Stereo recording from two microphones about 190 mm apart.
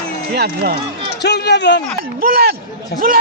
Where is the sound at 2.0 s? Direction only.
50° right (ahead or behind).